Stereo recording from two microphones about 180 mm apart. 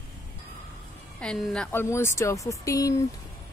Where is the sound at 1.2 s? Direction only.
5° left (ahead or behind).